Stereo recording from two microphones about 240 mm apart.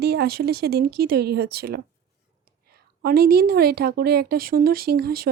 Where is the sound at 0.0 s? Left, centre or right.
Right.